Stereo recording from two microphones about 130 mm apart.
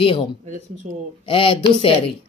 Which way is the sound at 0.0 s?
45° left (ahead or behind).